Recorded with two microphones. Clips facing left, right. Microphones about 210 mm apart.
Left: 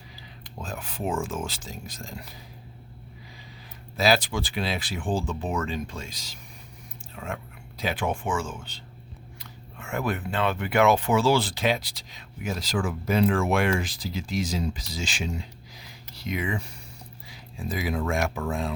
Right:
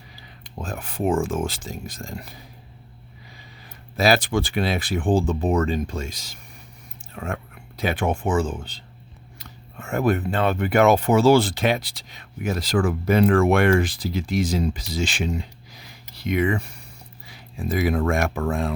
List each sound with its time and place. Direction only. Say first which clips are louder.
0.6 s speech: right 6 dB; 50° right (ahead or behind)
3.9 s speech: right 4 dB; 50° right (ahead or behind)
7.1 s whispering: right 5 dB; 55° right (ahead or behind)
7.8 s speech: right 5 dB; 55° right (ahead or behind)